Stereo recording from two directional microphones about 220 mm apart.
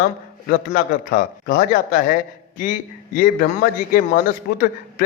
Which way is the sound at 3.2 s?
40° left (ahead or behind).